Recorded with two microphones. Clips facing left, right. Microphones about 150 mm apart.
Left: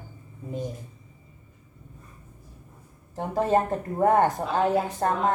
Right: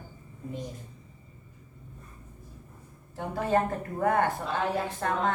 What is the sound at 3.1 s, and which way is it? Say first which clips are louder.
Speech: left 6 dB; 40° left (ahead or behind).